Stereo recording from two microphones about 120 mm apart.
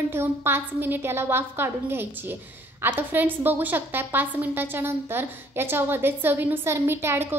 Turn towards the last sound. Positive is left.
turn(degrees=-20)  # may be behind; listen again after turning